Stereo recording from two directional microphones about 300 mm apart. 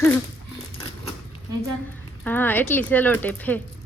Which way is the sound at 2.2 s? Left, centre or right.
Centre.